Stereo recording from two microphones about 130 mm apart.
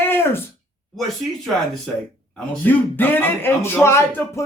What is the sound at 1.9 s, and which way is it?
A man's voice, 10° left (ahead or behind).